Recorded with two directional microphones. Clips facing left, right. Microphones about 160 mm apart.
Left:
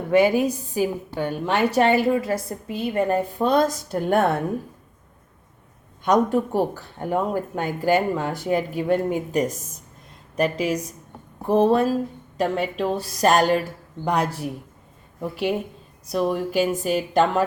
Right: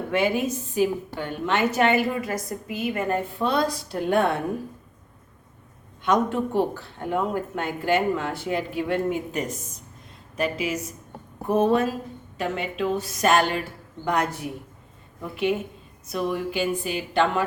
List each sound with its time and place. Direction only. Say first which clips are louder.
0.1 s a woman's voice: left 6 dB; 40° left (ahead or behind)
6.0 s a woman's voice: left 3 dB; 40° left (ahead or behind)
16.0 s a woman's voice: left 4 dB; 35° left (ahead or behind)